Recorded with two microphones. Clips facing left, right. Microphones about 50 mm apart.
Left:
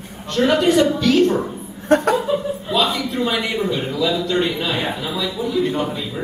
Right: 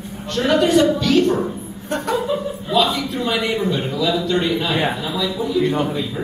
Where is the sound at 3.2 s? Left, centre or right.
Centre.